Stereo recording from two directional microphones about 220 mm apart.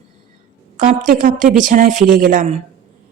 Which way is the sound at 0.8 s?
40° right (ahead or behind).